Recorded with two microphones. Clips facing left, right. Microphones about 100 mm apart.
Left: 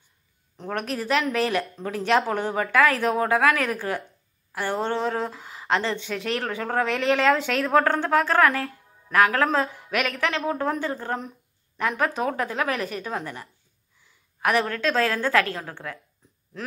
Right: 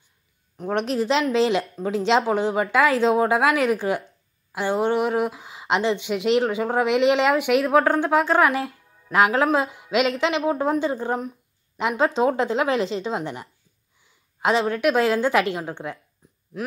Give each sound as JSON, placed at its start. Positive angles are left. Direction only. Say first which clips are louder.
{"t": 0.7, "sound": "speech", "louder": "right 4 dB", "side_deg": -25}
{"t": 11.1, "sound": "a sound", "louder": "right 5 dB", "side_deg": -5}
{"t": 12.0, "sound": "speech", "louder": "right 7 dB", "side_deg": -25}